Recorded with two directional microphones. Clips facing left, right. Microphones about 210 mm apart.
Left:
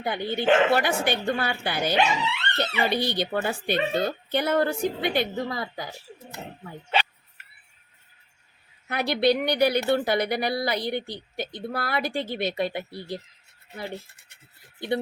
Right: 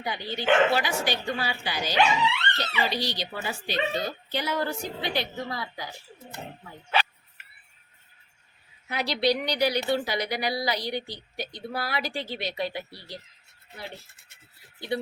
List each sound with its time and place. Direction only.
0.0 s speech: 55° left (ahead or behind)
8.9 s speech: 55° left (ahead or behind)